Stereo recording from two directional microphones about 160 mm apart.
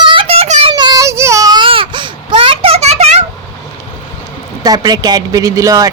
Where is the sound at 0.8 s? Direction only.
25° right (ahead or behind); by 3.2 s 40° right (ahead or behind).